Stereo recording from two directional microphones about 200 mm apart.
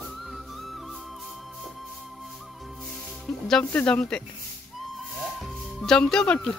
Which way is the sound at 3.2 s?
5° left (ahead or behind).